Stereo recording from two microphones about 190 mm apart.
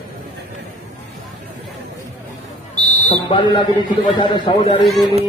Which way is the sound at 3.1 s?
25° left (ahead or behind).